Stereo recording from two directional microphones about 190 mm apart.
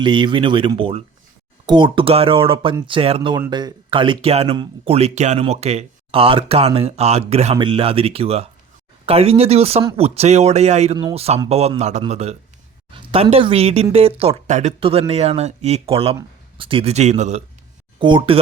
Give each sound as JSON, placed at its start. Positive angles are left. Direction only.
{"t": 0.0, "sound": "speech", "side_deg": -25}
{"t": 18.0, "sound": "speech", "side_deg": -25}